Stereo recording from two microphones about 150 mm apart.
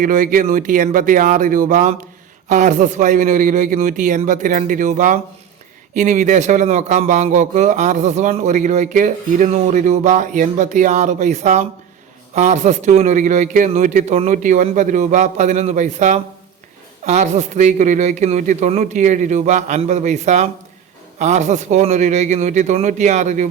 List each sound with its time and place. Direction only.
0.0 s a man's voice: 65° right (ahead or behind)